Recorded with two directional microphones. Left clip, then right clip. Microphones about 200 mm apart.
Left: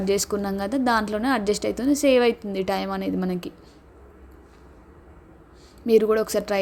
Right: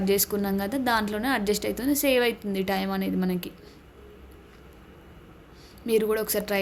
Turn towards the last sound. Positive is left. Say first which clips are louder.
# left 4 dB
turn(degrees=20)  # may be behind; listen again after turning